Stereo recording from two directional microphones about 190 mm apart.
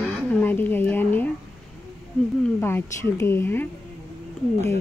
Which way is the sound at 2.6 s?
15° left (ahead or behind).